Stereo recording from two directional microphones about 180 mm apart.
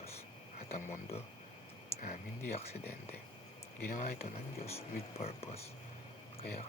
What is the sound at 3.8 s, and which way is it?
Speech, 60° left (ahead or behind).